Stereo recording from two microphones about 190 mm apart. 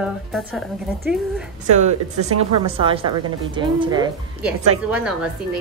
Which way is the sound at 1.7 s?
35° right (ahead or behind).